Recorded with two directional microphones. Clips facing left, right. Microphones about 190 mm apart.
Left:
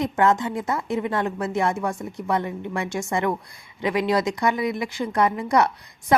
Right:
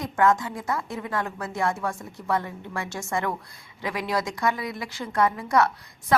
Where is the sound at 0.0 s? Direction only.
25° left (ahead or behind).